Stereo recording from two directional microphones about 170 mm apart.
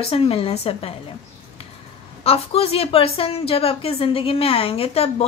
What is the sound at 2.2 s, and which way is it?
A woman's voice, 35° left (ahead or behind).